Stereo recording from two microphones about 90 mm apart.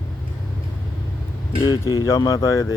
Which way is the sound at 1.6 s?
40° left (ahead or behind).